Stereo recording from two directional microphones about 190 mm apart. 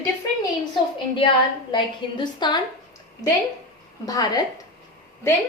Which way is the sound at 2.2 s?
25° left (ahead or behind).